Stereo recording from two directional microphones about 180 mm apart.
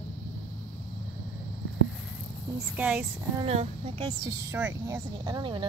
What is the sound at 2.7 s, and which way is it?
Speech, 10° right (ahead or behind).